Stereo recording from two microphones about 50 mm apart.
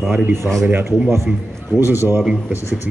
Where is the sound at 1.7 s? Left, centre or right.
Right.